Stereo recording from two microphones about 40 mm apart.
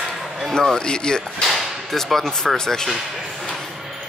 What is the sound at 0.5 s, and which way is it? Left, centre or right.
Speech, centre.